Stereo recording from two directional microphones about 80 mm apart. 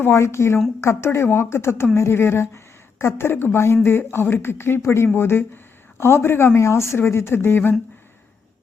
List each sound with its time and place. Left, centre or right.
0.0 s a woman's voice: left